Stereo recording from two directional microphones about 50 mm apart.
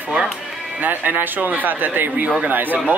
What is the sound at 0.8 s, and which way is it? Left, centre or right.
Speech, right.